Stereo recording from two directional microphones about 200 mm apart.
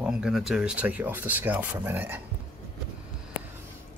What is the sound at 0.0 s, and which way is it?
Speech, centre (ahead or behind).